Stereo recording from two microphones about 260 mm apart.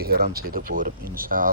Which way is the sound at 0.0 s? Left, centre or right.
Right.